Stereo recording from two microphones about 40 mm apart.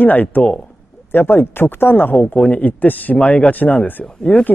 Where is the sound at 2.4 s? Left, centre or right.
Left.